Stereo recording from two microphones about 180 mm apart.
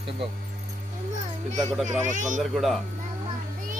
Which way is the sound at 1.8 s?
40° right (ahead or behind).